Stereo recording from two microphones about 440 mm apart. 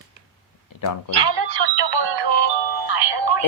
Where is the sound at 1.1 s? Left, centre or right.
Right.